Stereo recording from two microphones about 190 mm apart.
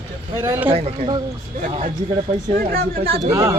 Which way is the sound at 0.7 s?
30° right (ahead or behind).